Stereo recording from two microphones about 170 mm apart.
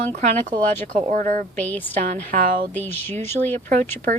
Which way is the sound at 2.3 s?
50° right (ahead or behind).